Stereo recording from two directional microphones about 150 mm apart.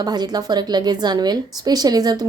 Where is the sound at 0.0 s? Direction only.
25° right (ahead or behind).